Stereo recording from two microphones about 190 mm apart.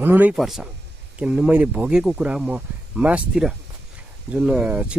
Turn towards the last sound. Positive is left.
turn(degrees=-5)  # may be behind; listen again after turning